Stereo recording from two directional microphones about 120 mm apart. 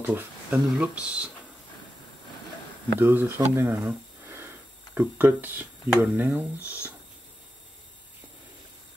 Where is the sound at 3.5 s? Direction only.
20° right (ahead or behind).